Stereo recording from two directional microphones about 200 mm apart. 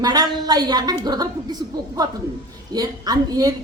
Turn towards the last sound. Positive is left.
turn(degrees=-20)  # may be behind; listen again after turning